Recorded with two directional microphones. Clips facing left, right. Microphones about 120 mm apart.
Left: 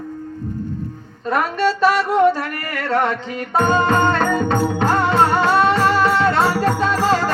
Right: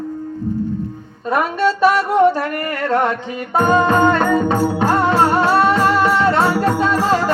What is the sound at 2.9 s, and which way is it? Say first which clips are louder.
Music: right 1 dB; centre (ahead or behind).